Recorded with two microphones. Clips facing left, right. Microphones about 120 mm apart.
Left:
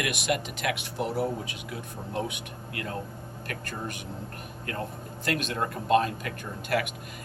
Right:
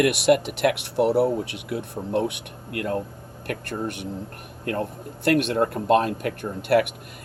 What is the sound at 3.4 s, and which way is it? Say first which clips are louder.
Speech: right 8 dB; 65° right (ahead or behind).